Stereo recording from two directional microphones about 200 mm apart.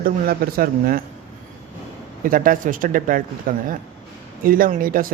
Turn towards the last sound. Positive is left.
turn(degrees=-45)  # may be behind; listen again after turning